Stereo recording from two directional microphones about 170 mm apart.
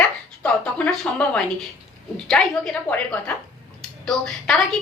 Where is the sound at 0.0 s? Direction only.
5° left (ahead or behind).